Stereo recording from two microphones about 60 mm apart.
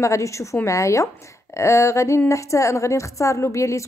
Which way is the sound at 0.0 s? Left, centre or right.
Left.